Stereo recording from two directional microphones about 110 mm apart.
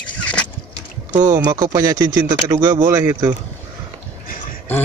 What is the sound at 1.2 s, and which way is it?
Speech, 35° right (ahead or behind).